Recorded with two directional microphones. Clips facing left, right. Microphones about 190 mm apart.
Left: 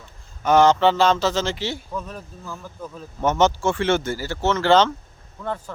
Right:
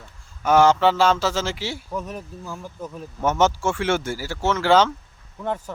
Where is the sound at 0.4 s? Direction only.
10° right (ahead or behind).